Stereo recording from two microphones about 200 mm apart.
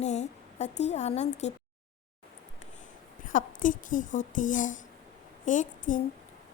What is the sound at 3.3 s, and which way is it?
Speech, 40° left (ahead or behind).